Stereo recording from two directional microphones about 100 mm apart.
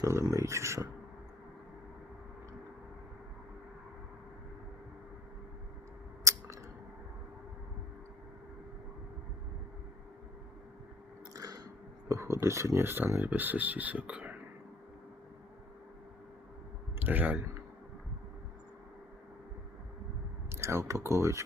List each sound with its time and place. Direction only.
0.0 s speech: 35° right (ahead or behind)
6.3 s a sound: 35° right (ahead or behind)
11.3 s a sound: 40° right (ahead or behind)
12.0 s speech: 30° right (ahead or behind); by 14.3 s 15° right (ahead or behind)
17.0 s speech: 20° right (ahead or behind)
20.5 s speech: 25° right (ahead or behind)